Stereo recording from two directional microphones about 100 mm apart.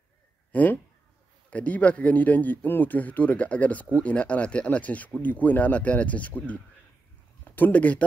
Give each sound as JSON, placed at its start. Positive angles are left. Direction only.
{"t": 0.5, "sound": "speech", "side_deg": 15}